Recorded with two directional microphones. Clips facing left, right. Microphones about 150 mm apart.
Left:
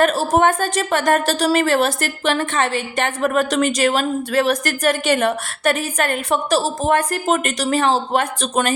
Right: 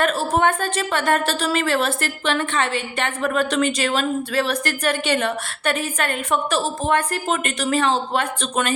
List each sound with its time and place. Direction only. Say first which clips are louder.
0.0 s a woman's voice: left 4 dB; 40° left (ahead or behind)